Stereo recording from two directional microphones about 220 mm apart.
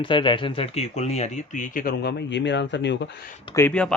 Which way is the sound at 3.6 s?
5° left (ahead or behind).